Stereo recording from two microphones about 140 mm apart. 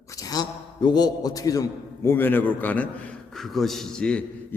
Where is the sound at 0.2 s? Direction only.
30° left (ahead or behind).